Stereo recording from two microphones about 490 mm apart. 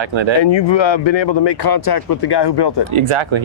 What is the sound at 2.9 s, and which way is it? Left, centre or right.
Speech, right.